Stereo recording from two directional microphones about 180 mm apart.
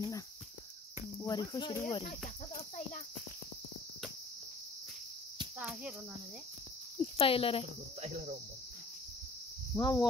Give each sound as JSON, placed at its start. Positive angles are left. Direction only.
{"t": 1.2, "sound": "speech", "side_deg": 20}
{"t": 5.6, "sound": "speech", "side_deg": -5}
{"t": 7.0, "sound": "speech", "side_deg": 30}
{"t": 8.0, "sound": "cricket", "side_deg": -40}
{"t": 9.8, "sound": "speech", "side_deg": 20}